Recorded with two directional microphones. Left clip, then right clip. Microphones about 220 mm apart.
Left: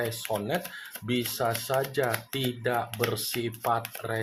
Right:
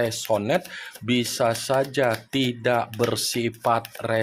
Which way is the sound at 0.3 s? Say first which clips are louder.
Right 8 dB; 45° right (ahead or behind).